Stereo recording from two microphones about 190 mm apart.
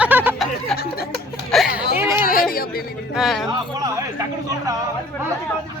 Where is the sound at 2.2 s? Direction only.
50° left (ahead or behind).